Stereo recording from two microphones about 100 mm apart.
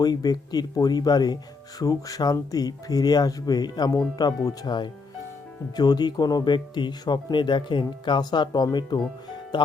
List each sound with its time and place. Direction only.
0.0 s speech: 40° left (ahead or behind)